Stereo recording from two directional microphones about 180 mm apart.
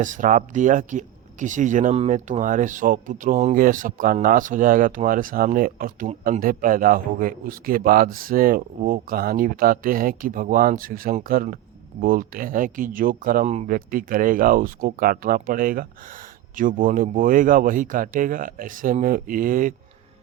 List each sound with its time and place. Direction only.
0.0 s speech: 45° right (ahead or behind)
13.7 s speech: 50° right (ahead or behind)